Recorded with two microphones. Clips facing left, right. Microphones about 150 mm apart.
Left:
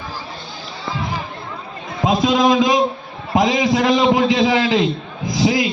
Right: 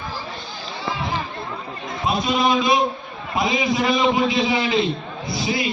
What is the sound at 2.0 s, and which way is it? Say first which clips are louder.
A man's voice: left 5 dB; 90° left.